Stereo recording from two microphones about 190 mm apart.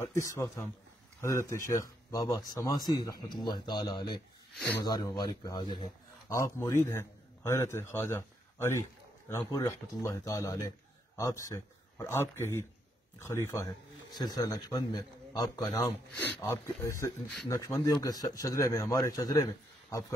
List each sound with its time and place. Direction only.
0.0 s a man's voice: 15° left (ahead or behind)